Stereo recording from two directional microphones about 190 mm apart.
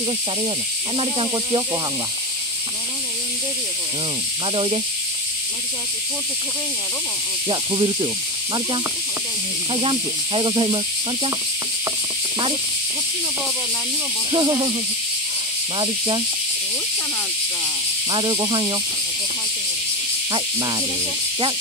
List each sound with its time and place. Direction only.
0.9 s speech: 25° right (ahead or behind)
7.4 s speech: 25° right (ahead or behind)
9.7 s speech: 30° right (ahead or behind)
14.3 s speech: 25° right (ahead or behind)
18.1 s speech: 25° right (ahead or behind)
20.3 s speech: 20° right (ahead or behind)